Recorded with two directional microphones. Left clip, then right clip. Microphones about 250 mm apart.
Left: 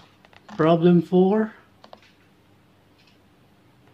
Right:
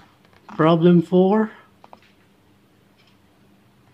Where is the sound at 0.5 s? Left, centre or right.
Centre.